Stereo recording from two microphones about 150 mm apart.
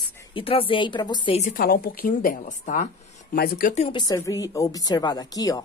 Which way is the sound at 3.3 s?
85° left.